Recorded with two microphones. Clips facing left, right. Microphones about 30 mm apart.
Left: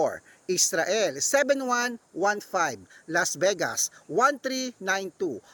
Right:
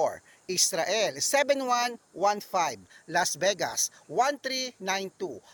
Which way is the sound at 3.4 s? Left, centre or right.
Centre.